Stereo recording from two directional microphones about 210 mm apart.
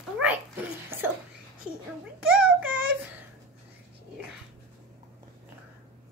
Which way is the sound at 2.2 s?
5° right (ahead or behind).